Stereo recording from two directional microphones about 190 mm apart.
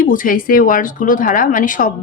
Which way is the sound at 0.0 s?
45° left (ahead or behind).